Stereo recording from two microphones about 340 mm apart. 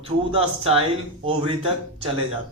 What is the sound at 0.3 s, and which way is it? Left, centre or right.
Speech, centre.